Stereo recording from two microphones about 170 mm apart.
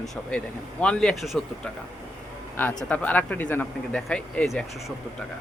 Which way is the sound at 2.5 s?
10° left (ahead or behind).